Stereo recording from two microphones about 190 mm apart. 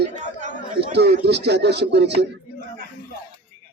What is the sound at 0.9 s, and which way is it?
Speech, 60° right (ahead or behind).